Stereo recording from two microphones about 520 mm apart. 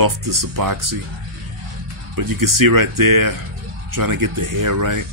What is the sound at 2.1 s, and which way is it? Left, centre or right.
Speech, right.